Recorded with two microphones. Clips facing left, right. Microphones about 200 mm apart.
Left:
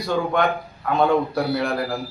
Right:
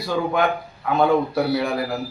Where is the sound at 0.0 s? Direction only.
5° right (ahead or behind).